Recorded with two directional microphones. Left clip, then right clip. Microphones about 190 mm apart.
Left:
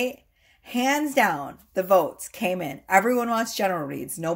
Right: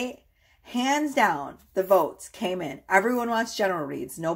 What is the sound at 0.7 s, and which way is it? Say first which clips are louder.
Speech: left 1 dB; 35° left (ahead or behind).